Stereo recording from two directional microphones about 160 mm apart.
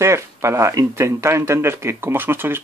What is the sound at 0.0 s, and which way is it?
Speech, 15° right (ahead or behind).